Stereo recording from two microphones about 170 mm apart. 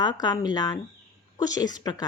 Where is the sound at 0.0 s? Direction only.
25° left (ahead or behind).